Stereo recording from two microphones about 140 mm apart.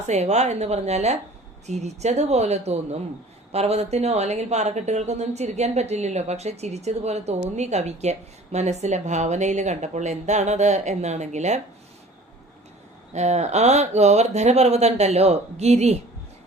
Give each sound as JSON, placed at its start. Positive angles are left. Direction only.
{"t": 0.0, "sound": "speech", "side_deg": -55}
{"t": 13.1, "sound": "speech", "side_deg": -55}